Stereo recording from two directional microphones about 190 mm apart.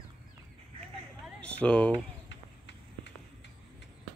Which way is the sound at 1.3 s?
5° left (ahead or behind).